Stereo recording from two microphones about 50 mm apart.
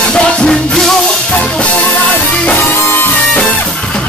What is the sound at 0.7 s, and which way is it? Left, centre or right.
Music, centre.